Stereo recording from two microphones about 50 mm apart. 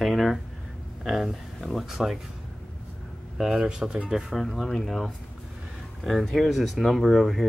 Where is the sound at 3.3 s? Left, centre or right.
Centre.